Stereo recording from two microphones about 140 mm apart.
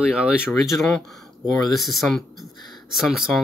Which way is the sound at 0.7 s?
5° left (ahead or behind).